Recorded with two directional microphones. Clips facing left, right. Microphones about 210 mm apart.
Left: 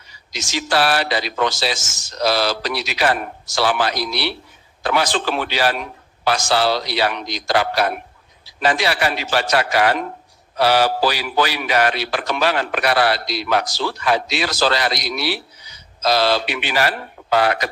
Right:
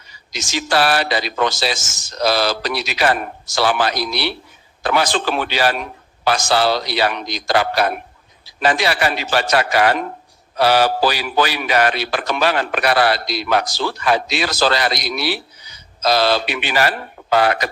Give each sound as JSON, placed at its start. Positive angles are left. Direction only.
{"t": 0.3, "sound": "a man's voice", "side_deg": -50}